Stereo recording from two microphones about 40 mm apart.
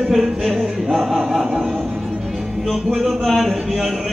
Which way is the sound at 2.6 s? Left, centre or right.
Centre.